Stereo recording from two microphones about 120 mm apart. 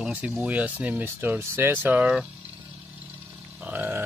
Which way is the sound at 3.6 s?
15° right (ahead or behind).